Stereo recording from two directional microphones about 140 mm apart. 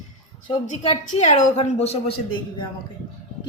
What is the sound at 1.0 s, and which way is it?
Speech, 65° left (ahead or behind).